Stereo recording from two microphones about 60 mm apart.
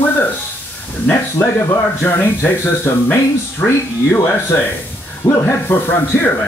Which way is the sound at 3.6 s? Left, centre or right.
Left.